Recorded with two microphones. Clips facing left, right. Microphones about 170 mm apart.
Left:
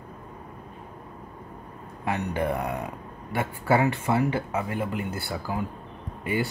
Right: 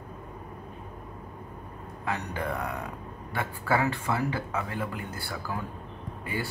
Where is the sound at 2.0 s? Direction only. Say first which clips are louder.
Left 5 dB; 25° left (ahead or behind).